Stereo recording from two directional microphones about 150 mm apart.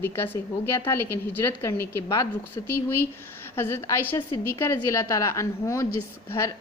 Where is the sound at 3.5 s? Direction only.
15° left (ahead or behind).